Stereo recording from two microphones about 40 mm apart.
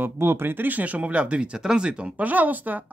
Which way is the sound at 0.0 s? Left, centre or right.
Right.